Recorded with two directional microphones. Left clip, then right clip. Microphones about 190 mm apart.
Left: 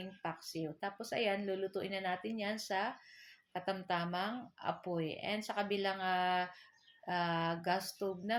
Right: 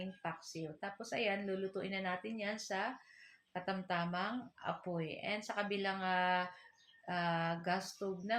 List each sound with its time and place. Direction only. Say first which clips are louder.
0.0 s speech: left 1 dB; 45° left (ahead or behind)